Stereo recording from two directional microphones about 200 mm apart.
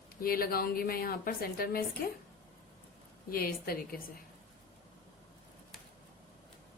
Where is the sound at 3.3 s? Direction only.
50° left (ahead or behind).